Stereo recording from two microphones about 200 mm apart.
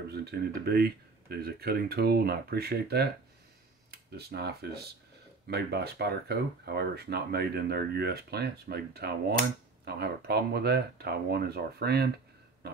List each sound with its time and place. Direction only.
0.1 s speech: 55° right (ahead or behind)
4.2 s speech: 55° right (ahead or behind)